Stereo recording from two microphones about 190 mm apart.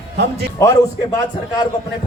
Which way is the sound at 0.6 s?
20° left (ahead or behind).